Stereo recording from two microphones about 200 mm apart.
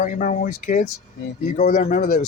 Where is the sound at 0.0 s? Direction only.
40° left (ahead or behind).